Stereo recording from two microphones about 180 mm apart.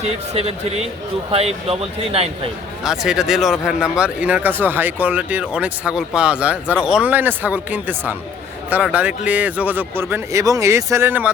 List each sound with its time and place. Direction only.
0.0 s speech: 35° right (ahead or behind)
2.8 s speech: 5° right (ahead or behind)